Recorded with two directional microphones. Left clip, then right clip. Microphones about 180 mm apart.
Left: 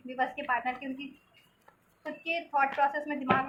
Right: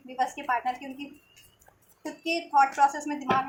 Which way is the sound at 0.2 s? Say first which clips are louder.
Right 3 dB; 25° right (ahead or behind).